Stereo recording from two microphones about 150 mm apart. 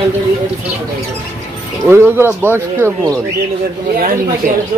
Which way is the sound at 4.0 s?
70° right (ahead or behind).